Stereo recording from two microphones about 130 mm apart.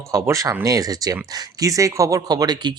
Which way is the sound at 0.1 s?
25° right (ahead or behind).